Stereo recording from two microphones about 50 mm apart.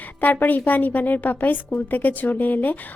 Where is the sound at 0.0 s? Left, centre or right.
Left.